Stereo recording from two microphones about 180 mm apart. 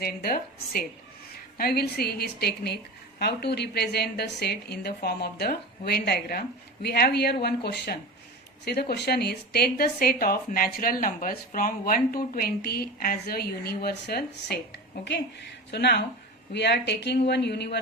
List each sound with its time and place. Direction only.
0.0 s a woman's voice: 55° left (ahead or behind)